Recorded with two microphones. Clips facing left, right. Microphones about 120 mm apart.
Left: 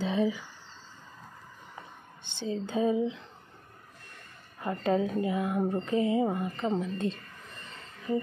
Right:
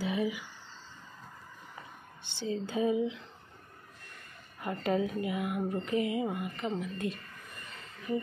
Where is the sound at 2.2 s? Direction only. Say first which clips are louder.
Left 1 dB; 20° left (ahead or behind).